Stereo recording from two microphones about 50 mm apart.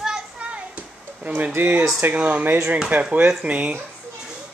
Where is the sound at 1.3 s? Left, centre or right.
Right.